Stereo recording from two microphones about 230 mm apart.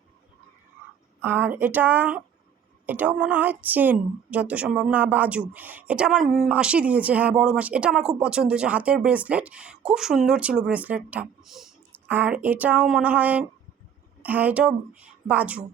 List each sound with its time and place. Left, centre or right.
1.2 s a woman's voice: centre